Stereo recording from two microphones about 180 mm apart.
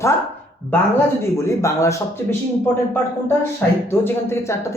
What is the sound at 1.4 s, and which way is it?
Speech, 15° left (ahead or behind).